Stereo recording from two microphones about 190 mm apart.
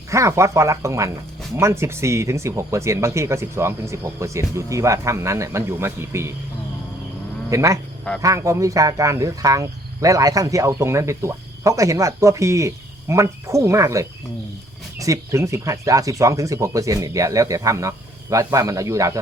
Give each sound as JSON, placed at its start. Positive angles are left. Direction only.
{"t": 0.1, "sound": "speech", "side_deg": -15}
{"t": 7.5, "sound": "speech", "side_deg": -15}